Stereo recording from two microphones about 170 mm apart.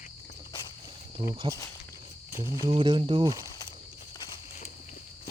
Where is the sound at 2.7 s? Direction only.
30° right (ahead or behind).